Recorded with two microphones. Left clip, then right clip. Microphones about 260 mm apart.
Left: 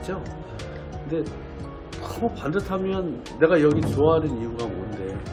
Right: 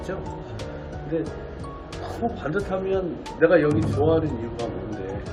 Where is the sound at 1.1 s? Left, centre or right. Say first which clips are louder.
Even; left.